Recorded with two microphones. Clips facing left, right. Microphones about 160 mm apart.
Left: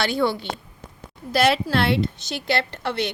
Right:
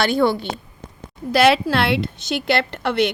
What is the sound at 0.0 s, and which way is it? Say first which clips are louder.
Speech: right 4 dB; 50° right (ahead or behind).